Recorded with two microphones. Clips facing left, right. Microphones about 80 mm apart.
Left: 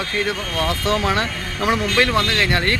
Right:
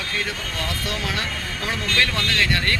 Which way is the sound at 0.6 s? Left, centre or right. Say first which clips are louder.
Left 9 dB; left.